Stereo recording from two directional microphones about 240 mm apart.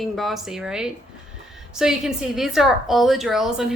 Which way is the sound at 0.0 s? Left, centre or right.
Centre.